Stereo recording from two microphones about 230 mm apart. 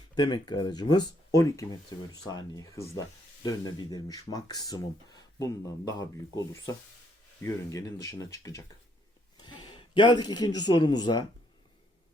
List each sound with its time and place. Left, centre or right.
0.1 s speech: centre